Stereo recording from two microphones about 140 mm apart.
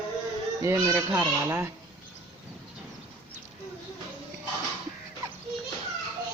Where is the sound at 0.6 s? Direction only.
20° right (ahead or behind).